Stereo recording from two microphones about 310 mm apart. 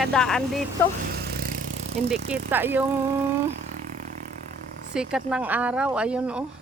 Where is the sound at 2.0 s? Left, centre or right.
Centre.